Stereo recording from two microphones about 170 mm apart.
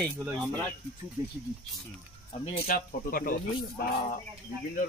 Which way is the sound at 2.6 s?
55° left (ahead or behind).